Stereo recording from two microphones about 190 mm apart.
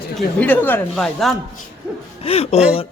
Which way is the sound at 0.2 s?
10° left (ahead or behind).